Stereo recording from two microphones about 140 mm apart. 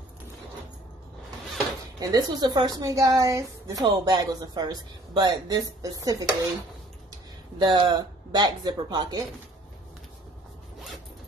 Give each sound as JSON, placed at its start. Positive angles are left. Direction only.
{"t": 2.0, "sound": "a woman's voice", "side_deg": -25}